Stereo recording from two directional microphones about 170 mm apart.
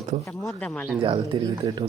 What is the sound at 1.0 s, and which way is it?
Speech, 30° right (ahead or behind).